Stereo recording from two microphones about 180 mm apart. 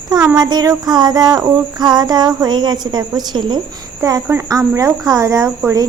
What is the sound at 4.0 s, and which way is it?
Speech, 20° right (ahead or behind).